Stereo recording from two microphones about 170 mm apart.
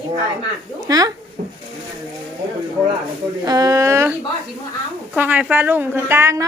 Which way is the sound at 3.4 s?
20° right (ahead or behind).